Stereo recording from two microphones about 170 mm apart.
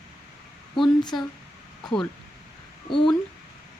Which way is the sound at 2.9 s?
30° left (ahead or behind).